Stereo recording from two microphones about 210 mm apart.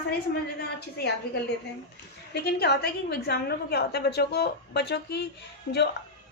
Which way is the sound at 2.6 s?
50° left (ahead or behind).